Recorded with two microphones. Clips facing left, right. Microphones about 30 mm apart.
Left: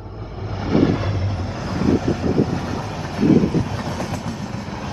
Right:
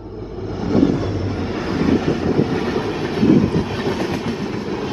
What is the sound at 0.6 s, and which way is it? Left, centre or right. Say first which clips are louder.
Train: right 1 dB; centre.